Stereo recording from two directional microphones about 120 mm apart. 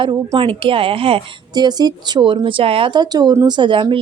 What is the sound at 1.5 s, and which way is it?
A woman's voice, 35° right (ahead or behind).